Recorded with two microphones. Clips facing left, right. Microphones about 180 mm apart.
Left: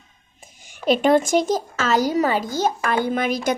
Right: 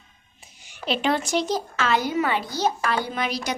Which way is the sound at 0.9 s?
50° left (ahead or behind).